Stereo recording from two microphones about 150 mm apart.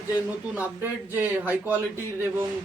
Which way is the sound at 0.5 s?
10° right (ahead or behind).